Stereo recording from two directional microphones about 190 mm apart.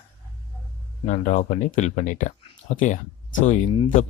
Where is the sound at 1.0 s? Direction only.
40° left (ahead or behind).